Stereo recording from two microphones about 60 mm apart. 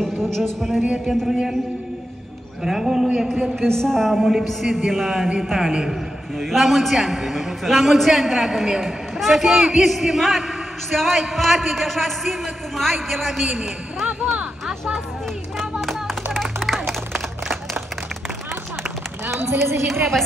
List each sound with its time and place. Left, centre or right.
0.0 s music: centre
1.0 s a man's voice: centre
2.6 s speech: centre
3.7 s a man's voice: centre
15.5 s clapping: centre
19.2 s a sound: right